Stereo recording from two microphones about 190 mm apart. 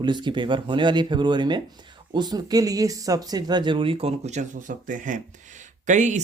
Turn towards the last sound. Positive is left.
turn(degrees=-40)  # may be behind; listen again after turning